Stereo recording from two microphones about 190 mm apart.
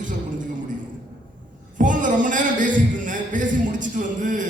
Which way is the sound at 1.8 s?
45° right (ahead or behind).